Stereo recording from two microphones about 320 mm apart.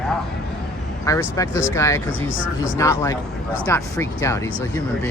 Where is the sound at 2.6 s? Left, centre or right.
Centre.